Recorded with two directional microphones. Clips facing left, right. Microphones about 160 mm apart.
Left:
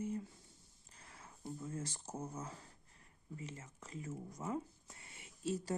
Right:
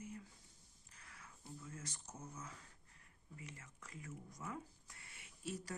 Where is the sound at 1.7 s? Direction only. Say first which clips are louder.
Left 8 dB; 30° left (ahead or behind).